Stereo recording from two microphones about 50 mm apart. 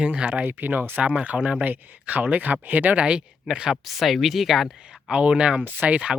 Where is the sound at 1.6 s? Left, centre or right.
Right; by 3.8 s centre.